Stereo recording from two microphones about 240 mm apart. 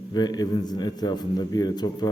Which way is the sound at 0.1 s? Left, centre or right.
Centre.